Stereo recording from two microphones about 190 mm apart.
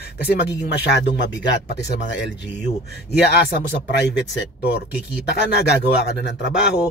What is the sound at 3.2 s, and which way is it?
Speech, 55° left (ahead or behind).